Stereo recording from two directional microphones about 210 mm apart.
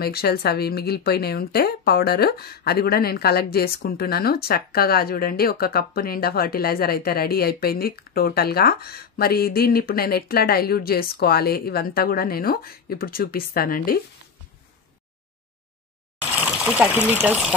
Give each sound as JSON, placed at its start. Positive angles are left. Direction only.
{"t": 0.0, "sound": "speech", "side_deg": 45}
{"t": 16.2, "sound": "water", "side_deg": -5}
{"t": 17.1, "sound": "speech", "side_deg": -5}